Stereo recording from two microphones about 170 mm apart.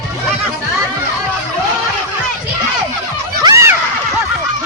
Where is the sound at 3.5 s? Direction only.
15° right (ahead or behind).